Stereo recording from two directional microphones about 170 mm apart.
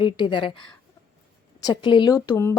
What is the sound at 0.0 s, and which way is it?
Speech, 30° left (ahead or behind).